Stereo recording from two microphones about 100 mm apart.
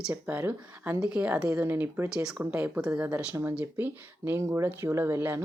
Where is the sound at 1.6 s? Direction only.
20° right (ahead or behind).